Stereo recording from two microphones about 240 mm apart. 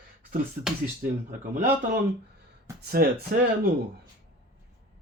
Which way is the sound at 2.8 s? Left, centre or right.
Right.